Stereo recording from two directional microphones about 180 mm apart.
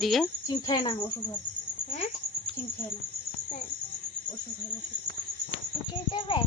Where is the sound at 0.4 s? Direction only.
20° left (ahead or behind).